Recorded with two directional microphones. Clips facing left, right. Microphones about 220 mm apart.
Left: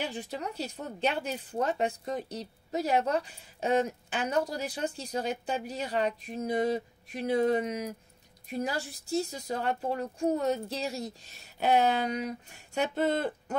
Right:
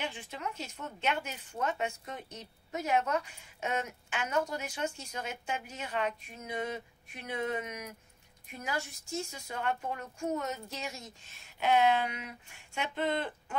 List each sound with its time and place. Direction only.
0.0 s speech: 35° left (ahead or behind)